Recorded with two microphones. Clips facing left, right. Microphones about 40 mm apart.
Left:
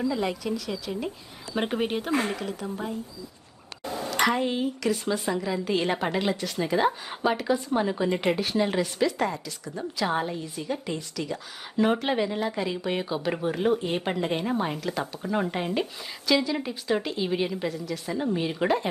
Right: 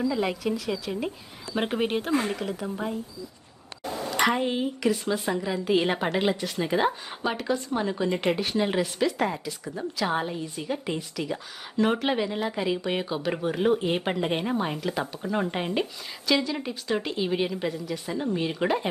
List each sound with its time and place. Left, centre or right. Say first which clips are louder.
0.1 s a woman's voice: right 1 dB; centre
3.8 s a sound: even; centre
4.1 s a woman's voice: even; centre
7.1 s a woman's voice: left 3 dB; centre
11.8 s a woman's voice: even; centre
15.5 s a woman's voice: even; centre